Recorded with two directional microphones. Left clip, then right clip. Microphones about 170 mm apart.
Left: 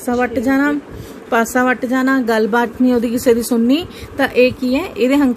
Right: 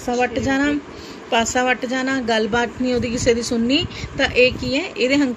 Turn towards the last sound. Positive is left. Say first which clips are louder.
# left 4 dB
turn(degrees=60)  # may be behind; listen again after turning